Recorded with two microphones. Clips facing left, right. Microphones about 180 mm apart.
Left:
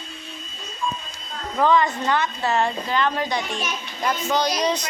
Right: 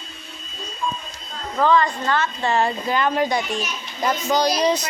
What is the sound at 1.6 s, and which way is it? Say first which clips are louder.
Speech: right 1 dB; 15° left (ahead or behind).